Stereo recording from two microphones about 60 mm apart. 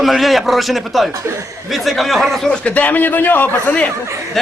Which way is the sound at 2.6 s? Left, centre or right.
Left.